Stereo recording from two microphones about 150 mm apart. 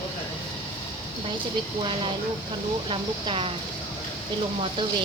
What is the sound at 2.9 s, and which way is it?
Speech, 35° right (ahead or behind).